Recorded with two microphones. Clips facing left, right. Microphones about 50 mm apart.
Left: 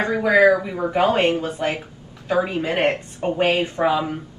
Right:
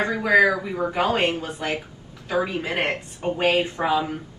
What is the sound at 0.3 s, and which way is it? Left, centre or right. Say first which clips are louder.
A woman's voice: left 3 dB; left.